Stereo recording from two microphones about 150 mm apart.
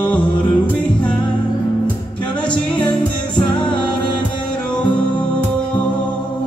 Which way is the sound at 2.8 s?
30° left (ahead or behind).